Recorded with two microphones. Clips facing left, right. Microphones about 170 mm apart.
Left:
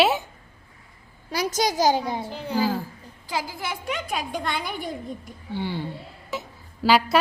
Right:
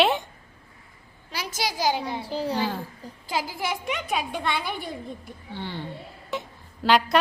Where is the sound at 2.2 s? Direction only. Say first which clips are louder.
Right 2 dB; 35° right (ahead or behind).